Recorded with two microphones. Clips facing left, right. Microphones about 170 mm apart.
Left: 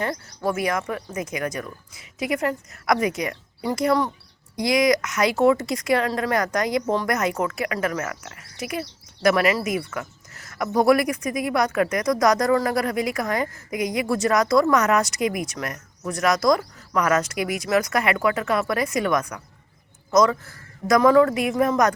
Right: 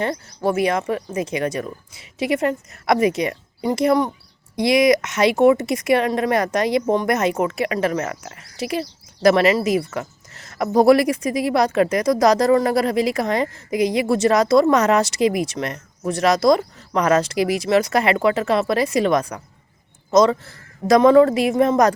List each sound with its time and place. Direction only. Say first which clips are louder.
0.0 s speech: right 4 dB; 25° right (ahead or behind)